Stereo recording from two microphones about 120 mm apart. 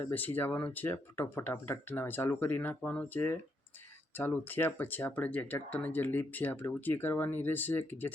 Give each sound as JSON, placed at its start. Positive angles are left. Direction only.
{"t": 0.0, "sound": "speech", "side_deg": 15}